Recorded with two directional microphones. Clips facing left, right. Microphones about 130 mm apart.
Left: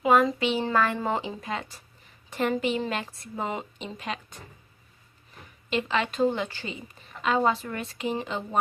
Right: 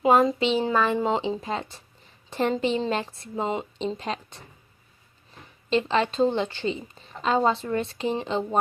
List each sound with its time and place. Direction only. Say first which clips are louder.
0.0 s a woman's voice: right 2 dB; 30° right (ahead or behind)
5.7 s a woman's voice: right 4 dB; 30° right (ahead or behind)